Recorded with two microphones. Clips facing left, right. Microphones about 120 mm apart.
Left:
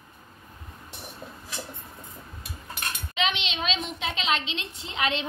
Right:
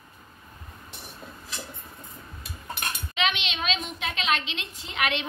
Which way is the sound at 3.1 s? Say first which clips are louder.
Even; 30° left (ahead or behind).